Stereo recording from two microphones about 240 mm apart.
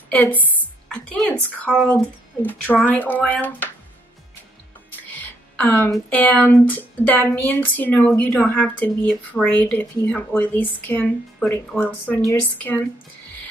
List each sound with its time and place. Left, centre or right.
0.1 s a woman's voice: centre
5.2 s speech: centre